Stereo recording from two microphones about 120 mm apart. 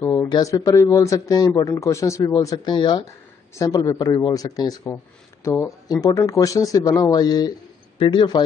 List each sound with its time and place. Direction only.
0.0 s speech: 25° left (ahead or behind)
3.5 s speech: 30° left (ahead or behind)